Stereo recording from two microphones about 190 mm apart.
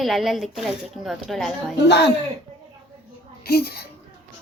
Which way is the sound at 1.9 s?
60° left (ahead or behind).